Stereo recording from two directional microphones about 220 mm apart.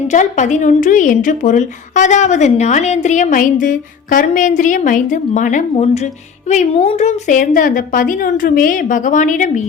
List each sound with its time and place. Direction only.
0.1 s speech: 35° left (ahead or behind)